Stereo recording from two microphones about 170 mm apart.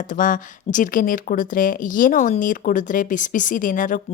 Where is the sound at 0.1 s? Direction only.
50° left (ahead or behind).